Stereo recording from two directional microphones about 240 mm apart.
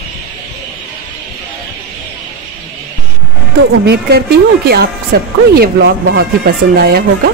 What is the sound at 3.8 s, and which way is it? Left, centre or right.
Speech, right.